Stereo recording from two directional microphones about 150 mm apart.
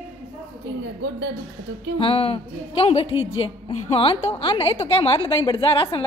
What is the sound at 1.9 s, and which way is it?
A woman's voice, 40° left (ahead or behind).